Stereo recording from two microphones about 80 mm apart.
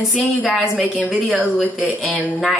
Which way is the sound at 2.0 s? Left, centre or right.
Left.